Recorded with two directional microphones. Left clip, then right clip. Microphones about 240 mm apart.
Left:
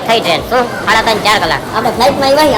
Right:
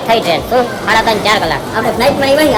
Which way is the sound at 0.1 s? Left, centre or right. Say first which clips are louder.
Even; centre.